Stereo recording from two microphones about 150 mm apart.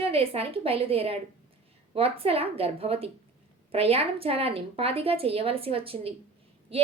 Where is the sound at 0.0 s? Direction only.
40° right (ahead or behind).